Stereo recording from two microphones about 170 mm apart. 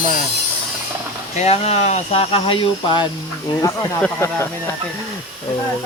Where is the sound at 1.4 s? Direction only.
40° left (ahead or behind); by 4.7 s 15° left (ahead or behind).